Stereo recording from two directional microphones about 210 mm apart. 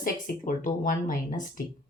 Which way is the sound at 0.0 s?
40° left (ahead or behind).